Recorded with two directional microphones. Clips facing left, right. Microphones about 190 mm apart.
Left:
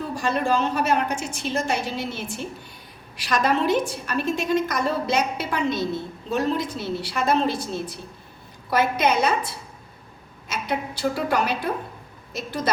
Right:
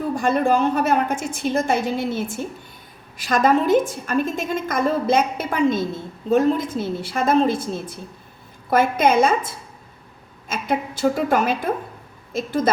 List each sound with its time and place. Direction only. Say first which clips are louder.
0.1 s a woman's voice: right 5 dB; 55° right (ahead or behind)